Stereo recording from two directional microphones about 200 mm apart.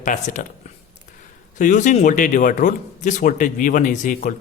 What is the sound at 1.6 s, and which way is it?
Speech, 40° left (ahead or behind).